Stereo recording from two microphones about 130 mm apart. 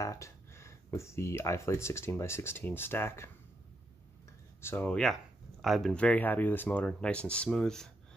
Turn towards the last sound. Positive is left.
turn(degrees=5)  # may be behind; listen again after turning